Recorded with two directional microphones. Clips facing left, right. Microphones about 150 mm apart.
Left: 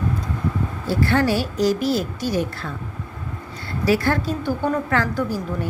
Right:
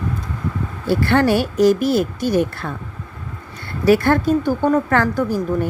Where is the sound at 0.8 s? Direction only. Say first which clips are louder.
Right 4 dB; 65° right (ahead or behind).